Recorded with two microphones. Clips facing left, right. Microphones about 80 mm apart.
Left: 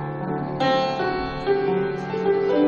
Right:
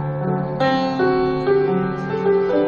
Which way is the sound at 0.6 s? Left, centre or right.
Right.